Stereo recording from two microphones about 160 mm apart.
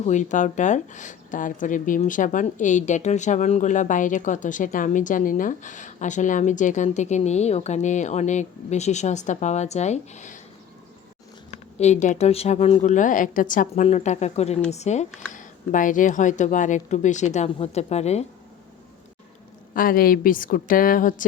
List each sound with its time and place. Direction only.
0.0 s speech: 50° left (ahead or behind)
11.8 s speech: 45° left (ahead or behind)
13.8 s speech: 45° left (ahead or behind)
19.7 s a woman's voice: 65° left (ahead or behind)